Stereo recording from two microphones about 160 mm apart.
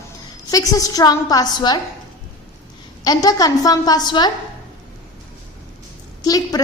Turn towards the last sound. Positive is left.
turn(degrees=25)  # may be behind; listen again after turning